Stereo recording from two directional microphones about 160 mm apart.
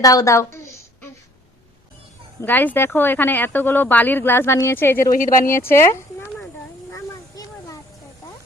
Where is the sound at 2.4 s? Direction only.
10° left (ahead or behind).